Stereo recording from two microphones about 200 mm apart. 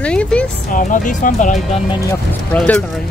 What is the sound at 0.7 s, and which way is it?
Speech, 40° left (ahead or behind).